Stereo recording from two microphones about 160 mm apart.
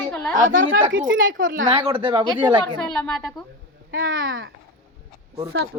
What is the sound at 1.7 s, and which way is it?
Speech, 35° right (ahead or behind).